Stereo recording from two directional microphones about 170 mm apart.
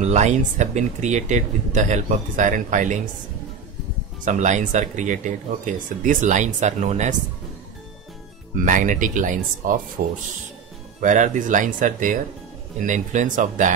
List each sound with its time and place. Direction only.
0.0 s speech: 40° right (ahead or behind)
4.2 s speech: 45° right (ahead or behind)
8.6 s speech: 50° right (ahead or behind)
10.0 s speech: 60° right (ahead or behind)
11.0 s speech: 50° right (ahead or behind)